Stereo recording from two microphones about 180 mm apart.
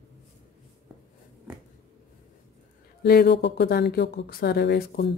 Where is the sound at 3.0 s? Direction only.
60° left (ahead or behind).